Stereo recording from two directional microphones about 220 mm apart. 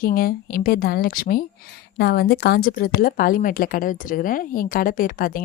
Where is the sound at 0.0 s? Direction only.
40° left (ahead or behind).